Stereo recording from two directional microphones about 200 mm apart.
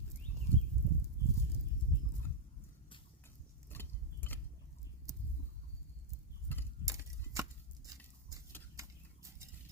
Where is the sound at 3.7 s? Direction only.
10° left (ahead or behind).